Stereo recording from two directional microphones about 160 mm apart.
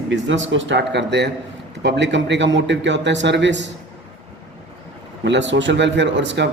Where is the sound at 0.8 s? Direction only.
90° right.